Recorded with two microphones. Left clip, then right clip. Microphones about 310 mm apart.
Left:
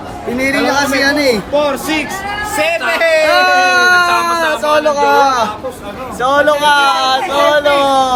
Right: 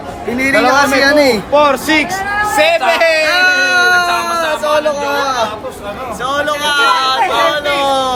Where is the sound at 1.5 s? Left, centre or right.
Centre.